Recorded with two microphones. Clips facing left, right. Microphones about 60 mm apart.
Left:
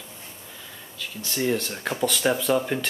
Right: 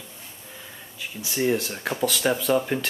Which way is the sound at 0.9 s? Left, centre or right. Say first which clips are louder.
Right 1 dB; centre.